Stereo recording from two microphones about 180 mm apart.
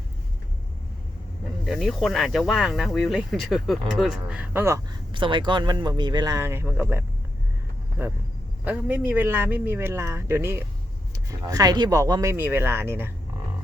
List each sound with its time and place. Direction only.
1.6 s speech: centre (ahead or behind)
5.1 s speech: 25° right (ahead or behind)